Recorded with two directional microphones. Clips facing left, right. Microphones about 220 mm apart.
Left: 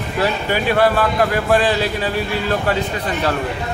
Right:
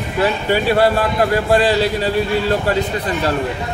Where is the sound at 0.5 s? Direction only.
30° right (ahead or behind).